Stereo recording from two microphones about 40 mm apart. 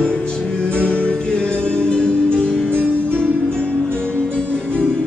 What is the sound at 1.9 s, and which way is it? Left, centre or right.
Music, left.